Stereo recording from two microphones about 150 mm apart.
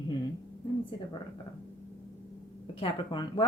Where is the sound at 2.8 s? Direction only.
30° left (ahead or behind).